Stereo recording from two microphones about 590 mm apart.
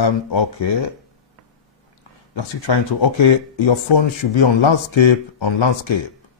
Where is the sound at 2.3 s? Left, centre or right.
Left.